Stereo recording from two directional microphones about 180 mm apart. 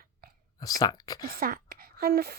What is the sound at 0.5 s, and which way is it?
Speech, 20° left (ahead or behind).